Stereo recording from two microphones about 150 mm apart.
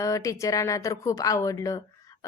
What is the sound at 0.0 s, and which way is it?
A woman's voice, 20° left (ahead or behind).